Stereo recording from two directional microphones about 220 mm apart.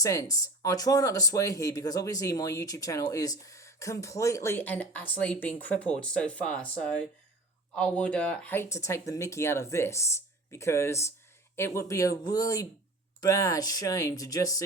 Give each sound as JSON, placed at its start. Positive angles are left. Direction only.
{"t": 0.0, "sound": "speech", "side_deg": 15}